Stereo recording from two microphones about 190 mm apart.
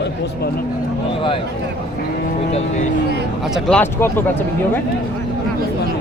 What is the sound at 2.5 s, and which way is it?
Speech, 35° left (ahead or behind).